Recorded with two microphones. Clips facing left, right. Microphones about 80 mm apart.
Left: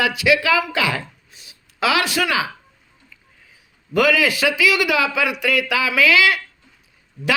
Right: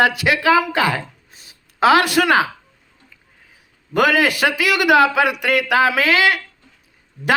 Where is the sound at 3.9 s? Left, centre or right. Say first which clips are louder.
Right 1 dB; right.